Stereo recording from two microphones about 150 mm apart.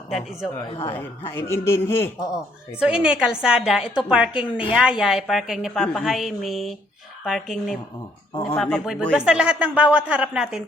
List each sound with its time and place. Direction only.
0.9 s a man's voice: 15° left (ahead or behind)
2.8 s a woman's voice: 5° right (ahead or behind)